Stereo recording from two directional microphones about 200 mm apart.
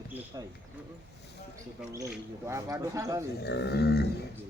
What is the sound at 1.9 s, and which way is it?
Speech, 15° right (ahead or behind).